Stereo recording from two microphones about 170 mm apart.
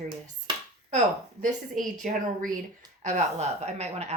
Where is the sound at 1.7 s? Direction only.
50° right (ahead or behind).